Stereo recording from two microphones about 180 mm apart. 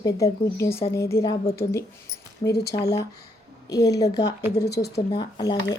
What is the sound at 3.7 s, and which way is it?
Speech, 20° left (ahead or behind).